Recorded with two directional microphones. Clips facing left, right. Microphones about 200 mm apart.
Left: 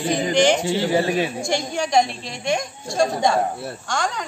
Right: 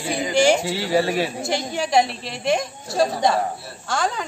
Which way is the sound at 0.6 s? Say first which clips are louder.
Left 1 dB; 20° left (ahead or behind).